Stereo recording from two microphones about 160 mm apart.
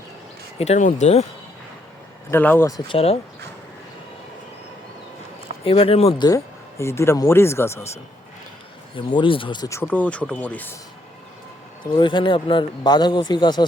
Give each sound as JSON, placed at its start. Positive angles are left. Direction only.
{"t": 0.6, "sound": "speech", "side_deg": 40}
{"t": 2.3, "sound": "speech", "side_deg": 10}
{"t": 2.8, "sound": "speech", "side_deg": 35}
{"t": 5.6, "sound": "speech", "side_deg": 35}
{"t": 6.2, "sound": "speech", "side_deg": 20}
{"t": 9.0, "sound": "speech", "side_deg": 30}
{"t": 11.9, "sound": "speech", "side_deg": 30}